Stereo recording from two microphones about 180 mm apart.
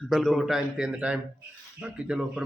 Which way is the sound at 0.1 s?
Centre (ahead or behind).